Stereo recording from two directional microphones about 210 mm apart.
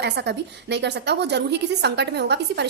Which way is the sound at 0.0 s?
55° right (ahead or behind).